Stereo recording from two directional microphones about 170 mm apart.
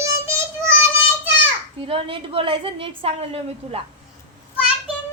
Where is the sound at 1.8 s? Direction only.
35° right (ahead or behind).